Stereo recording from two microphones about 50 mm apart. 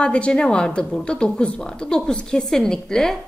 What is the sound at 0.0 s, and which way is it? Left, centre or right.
A woman's voice, centre.